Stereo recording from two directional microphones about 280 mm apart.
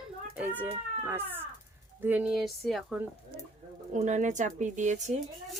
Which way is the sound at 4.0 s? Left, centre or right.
Right.